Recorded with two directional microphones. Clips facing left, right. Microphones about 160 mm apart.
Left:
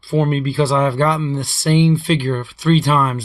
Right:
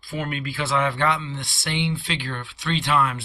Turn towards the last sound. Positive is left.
turn(degrees=40)  # may be behind; listen again after turning